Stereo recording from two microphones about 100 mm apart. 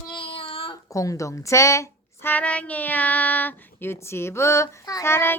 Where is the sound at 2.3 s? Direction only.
15° left (ahead or behind); by 5.1 s 35° left (ahead or behind).